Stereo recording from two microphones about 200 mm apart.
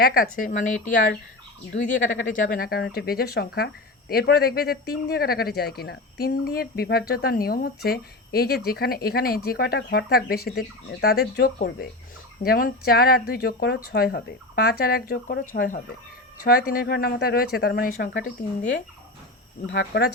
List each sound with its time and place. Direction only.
0.0 s speech: 50° left (ahead or behind)
2.5 s speech: 50° left (ahead or behind)
19.6 s speech: 60° left (ahead or behind)